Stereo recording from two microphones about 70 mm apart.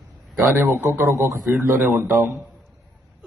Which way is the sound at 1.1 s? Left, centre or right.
Right.